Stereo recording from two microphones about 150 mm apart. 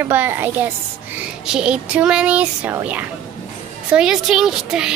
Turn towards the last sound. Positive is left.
turn(degrees=-5)  # may be behind; listen again after turning